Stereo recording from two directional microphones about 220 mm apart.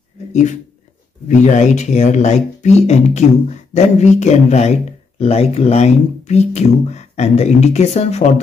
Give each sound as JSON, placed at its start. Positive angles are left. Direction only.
{"t": 0.3, "sound": "speech", "side_deg": 30}